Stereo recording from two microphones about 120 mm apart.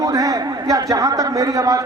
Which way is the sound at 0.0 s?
30° right (ahead or behind).